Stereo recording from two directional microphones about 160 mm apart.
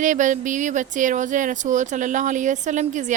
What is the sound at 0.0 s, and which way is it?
A woman's voice, 50° right (ahead or behind).